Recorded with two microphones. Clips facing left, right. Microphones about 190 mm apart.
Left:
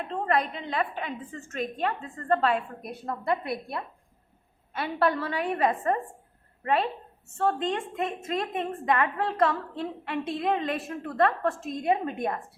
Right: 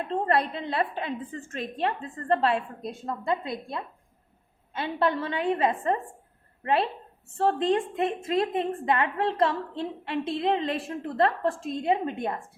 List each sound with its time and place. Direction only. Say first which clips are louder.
0.3 s a woman's voice: left 1 dB; 35° right (ahead or behind)
7.3 s a woman's voice: right 3 dB; 35° right (ahead or behind)